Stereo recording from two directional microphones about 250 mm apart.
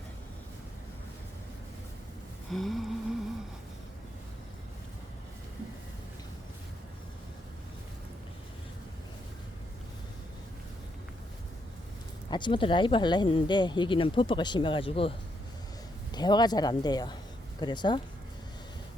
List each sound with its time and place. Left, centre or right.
2.5 s a sound: centre
12.3 s speech: centre
16.1 s speech: centre